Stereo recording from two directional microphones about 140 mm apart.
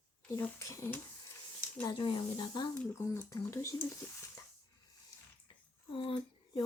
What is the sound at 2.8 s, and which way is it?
Speech, 15° left (ahead or behind).